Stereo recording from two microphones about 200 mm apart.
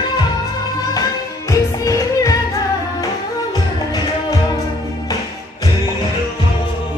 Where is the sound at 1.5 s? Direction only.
15° left (ahead or behind).